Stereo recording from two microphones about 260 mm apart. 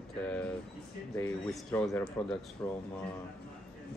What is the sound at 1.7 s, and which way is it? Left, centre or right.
A man's voice, centre.